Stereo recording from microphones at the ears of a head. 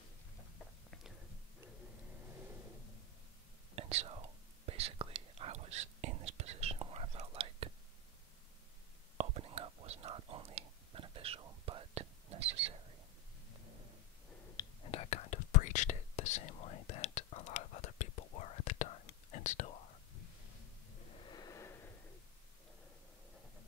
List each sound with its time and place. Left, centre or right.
3.7 s whispering: right
9.2 s whispering: right
14.4 s whispering: left